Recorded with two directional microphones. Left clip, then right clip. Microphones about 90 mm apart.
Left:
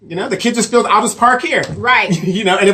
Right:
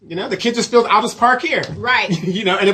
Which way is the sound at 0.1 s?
30° right (ahead or behind).